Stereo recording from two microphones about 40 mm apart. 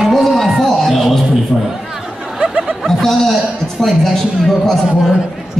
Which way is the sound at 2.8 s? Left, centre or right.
Centre.